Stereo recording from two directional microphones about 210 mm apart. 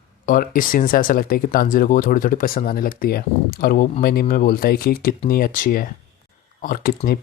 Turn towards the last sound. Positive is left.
turn(degrees=40)  # may be behind; listen again after turning